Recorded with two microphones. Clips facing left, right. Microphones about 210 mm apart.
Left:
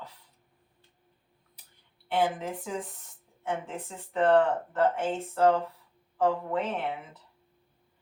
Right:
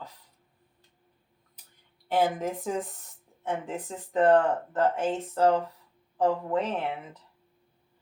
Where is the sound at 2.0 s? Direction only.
40° right (ahead or behind).